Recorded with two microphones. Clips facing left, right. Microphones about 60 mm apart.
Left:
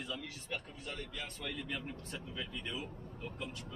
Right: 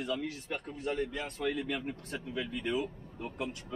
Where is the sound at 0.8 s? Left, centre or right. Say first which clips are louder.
Right 10 dB; right.